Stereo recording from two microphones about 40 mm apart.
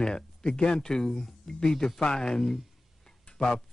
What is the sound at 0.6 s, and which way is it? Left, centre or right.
Speech, centre.